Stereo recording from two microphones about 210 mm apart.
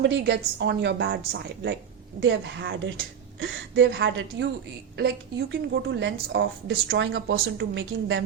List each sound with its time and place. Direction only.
0.0 s speech: 55° right (ahead or behind)